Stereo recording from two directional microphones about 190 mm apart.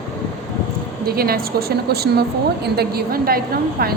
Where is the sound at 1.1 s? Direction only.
50° right (ahead or behind).